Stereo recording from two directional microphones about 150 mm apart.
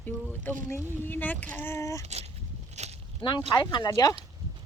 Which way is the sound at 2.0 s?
45° right (ahead or behind).